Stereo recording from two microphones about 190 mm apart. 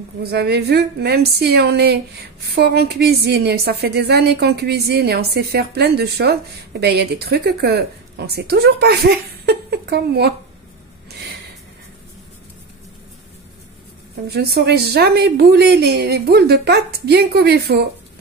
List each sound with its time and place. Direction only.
0.2 s a woman's voice: 60° right (ahead or behind)
14.2 s a woman's voice: 55° right (ahead or behind)